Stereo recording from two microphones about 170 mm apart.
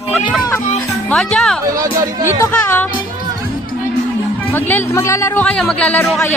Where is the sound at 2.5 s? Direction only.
10° left (ahead or behind).